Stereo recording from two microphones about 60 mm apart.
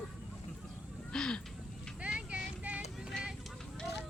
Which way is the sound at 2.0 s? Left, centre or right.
Right.